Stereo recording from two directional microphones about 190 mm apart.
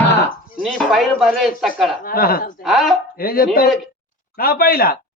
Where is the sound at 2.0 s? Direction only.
50° left (ahead or behind).